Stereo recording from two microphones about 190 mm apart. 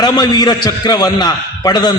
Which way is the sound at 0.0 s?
20° left (ahead or behind).